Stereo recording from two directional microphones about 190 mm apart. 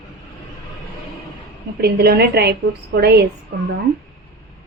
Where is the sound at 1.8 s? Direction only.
55° right (ahead or behind).